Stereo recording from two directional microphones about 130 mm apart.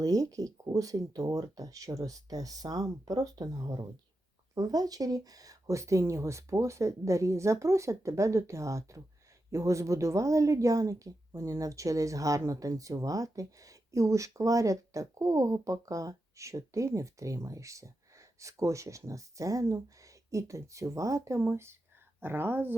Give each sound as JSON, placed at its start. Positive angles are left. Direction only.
{"t": 0.0, "sound": "a woman's voice", "side_deg": -25}